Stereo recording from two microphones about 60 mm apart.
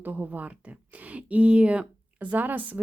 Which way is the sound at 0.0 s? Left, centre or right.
Right.